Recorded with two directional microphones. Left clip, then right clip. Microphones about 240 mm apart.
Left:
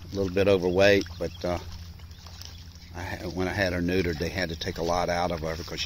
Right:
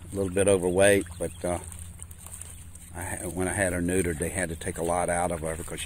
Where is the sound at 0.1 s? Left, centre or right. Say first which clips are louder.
Left 1 dB; centre.